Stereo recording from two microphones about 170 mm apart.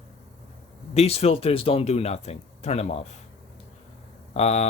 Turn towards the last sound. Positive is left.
turn(degrees=40)  # may be behind; listen again after turning